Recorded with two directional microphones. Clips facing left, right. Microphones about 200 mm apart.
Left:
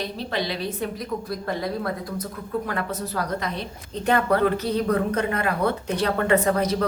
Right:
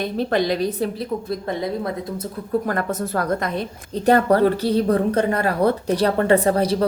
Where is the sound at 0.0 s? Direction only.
50° right (ahead or behind).